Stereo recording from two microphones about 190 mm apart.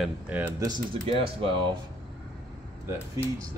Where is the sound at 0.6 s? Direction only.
25° right (ahead or behind).